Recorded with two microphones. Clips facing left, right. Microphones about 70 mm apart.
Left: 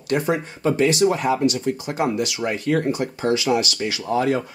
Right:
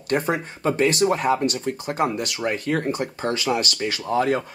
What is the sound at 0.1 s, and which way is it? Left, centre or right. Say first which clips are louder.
Speech: left 1 dB; right.